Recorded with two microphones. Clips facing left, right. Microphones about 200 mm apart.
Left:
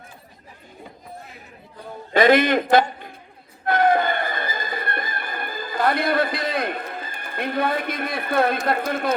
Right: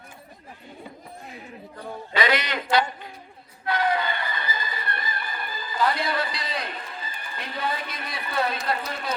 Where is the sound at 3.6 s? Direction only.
50° left (ahead or behind).